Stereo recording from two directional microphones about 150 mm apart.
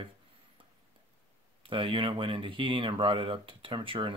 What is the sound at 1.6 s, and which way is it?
Speech, 35° right (ahead or behind).